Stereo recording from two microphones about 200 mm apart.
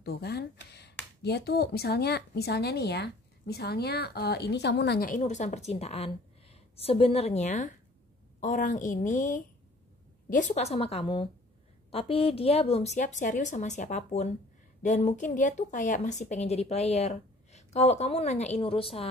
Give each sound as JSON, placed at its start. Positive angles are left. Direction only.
{"t": 0.0, "sound": "a woman's voice", "side_deg": 55}